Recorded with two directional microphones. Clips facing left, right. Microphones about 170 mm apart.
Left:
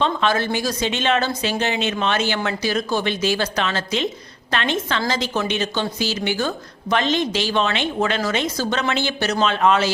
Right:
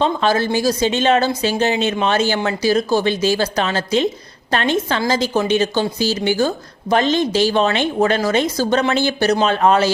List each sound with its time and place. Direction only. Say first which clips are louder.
0.0 s a woman's voice: right 3 dB; 35° right (ahead or behind)